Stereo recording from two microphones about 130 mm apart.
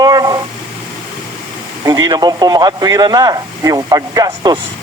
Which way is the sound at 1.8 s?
30° right (ahead or behind).